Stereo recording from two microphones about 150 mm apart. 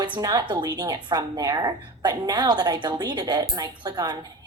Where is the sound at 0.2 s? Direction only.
25° right (ahead or behind).